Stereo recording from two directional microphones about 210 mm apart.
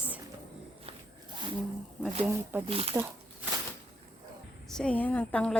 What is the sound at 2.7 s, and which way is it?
Speech, 30° right (ahead or behind).